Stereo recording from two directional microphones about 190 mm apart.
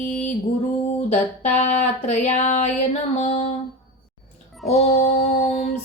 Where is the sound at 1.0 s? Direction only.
35° left (ahead or behind).